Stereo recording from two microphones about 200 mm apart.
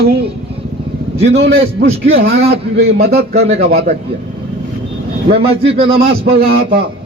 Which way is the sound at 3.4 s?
30° right (ahead or behind).